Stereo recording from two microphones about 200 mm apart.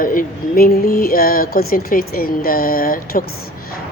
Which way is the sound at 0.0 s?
45° left (ahead or behind).